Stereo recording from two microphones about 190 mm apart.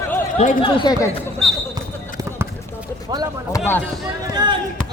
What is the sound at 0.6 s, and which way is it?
Speech, 25° left (ahead or behind).